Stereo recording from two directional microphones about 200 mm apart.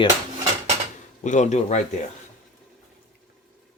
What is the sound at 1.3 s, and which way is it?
Speech, 35° left (ahead or behind).